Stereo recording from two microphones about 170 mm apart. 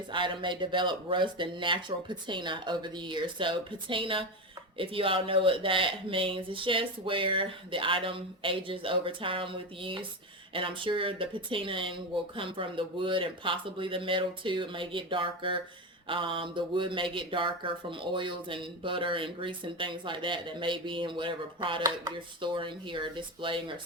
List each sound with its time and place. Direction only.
0.1 s speech: 30° right (ahead or behind)